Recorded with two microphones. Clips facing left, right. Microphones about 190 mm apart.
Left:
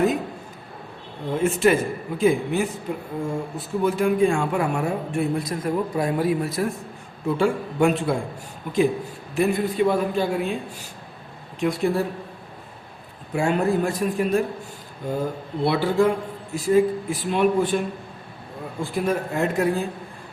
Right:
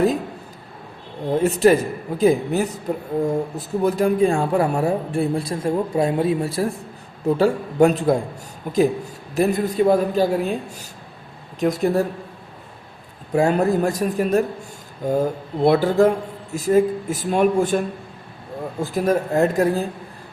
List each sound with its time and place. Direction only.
1.3 s speech: 35° right (ahead or behind)
13.3 s speech: 40° right (ahead or behind)
18.8 s speech: 40° right (ahead or behind)